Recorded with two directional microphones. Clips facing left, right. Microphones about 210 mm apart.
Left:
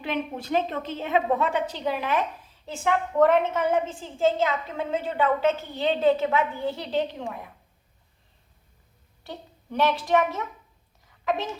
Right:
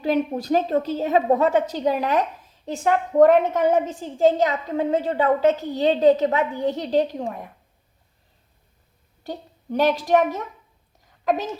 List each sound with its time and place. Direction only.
0.0 s a woman's voice: 40° right (ahead or behind)
9.2 s a woman's voice: 40° right (ahead or behind)